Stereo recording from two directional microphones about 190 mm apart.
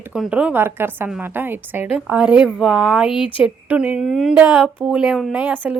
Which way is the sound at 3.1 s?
25° left (ahead or behind).